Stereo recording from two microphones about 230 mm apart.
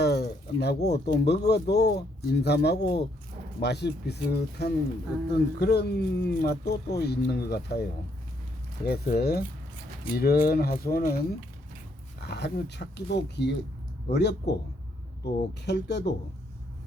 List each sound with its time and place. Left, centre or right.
0.0 s speech: left
12.2 s speech: left